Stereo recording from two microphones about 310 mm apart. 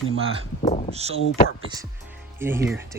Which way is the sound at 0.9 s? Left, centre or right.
Centre.